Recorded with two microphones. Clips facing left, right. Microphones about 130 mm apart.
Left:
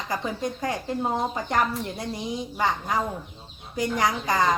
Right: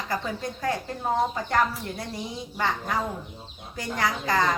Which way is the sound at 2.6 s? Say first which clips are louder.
Left 1 dB; 15° left (ahead or behind).